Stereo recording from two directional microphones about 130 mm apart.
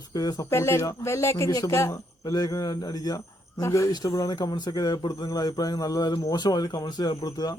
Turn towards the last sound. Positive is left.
turn(degrees=30)  # may be behind; listen again after turning